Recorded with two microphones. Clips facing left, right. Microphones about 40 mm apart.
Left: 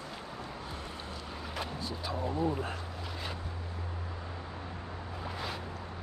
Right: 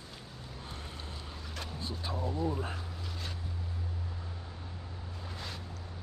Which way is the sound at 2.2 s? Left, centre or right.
Left.